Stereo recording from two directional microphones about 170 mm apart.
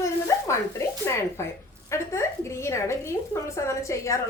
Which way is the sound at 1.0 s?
15° left (ahead or behind).